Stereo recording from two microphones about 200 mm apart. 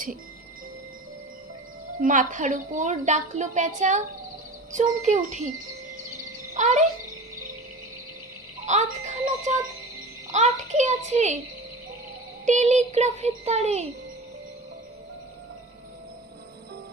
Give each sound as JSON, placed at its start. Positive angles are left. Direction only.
{"t": 2.0, "sound": "a woman's voice", "side_deg": -40}
{"t": 6.5, "sound": "a child's voice", "side_deg": -35}
{"t": 8.6, "sound": "a woman's voice", "side_deg": -35}
{"t": 12.5, "sound": "a woman's voice", "side_deg": -35}